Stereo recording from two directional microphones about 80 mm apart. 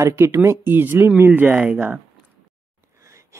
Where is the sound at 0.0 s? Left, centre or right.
Right.